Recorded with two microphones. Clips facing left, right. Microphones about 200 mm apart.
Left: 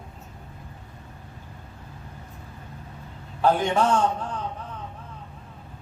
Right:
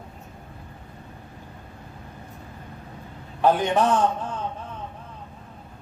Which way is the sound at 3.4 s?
20° right (ahead or behind).